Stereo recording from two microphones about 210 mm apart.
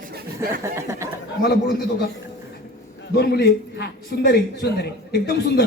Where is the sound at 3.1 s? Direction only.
50° left (ahead or behind).